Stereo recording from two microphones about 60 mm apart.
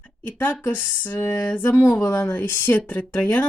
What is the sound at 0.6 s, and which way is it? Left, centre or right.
Speech, left.